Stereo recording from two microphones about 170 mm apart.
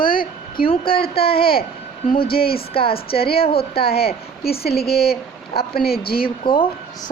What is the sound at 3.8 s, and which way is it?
Speech, 65° left (ahead or behind).